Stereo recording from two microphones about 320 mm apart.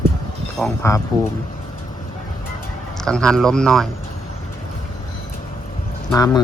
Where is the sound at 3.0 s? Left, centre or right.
Centre.